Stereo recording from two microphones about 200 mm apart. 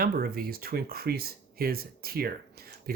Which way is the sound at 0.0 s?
50° right (ahead or behind).